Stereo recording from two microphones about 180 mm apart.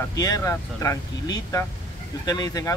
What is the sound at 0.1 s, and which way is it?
Speech, 20° left (ahead or behind).